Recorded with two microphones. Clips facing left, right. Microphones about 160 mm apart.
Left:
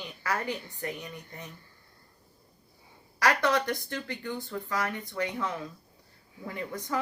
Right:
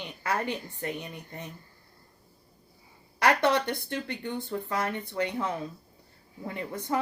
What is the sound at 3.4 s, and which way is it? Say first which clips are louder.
Speech: right 2 dB; 25° right (ahead or behind).